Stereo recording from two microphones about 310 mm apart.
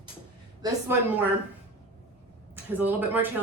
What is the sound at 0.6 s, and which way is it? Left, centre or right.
Speech, centre.